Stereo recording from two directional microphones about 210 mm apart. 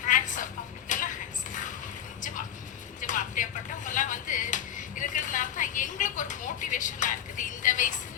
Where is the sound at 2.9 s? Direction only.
35° left (ahead or behind).